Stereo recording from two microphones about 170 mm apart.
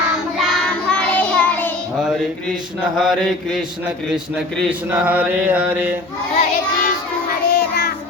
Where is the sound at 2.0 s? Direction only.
Centre (ahead or behind).